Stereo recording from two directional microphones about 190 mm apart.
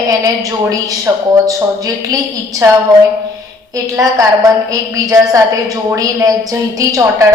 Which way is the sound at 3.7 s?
20° right (ahead or behind).